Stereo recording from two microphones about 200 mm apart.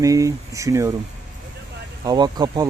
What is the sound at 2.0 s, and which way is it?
Speech, 20° right (ahead or behind).